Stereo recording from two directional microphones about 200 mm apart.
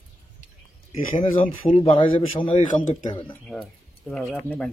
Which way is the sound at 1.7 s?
25° left (ahead or behind).